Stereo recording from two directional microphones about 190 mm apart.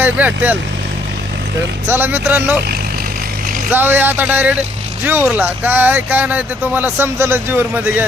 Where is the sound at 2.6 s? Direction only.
55° right (ahead or behind).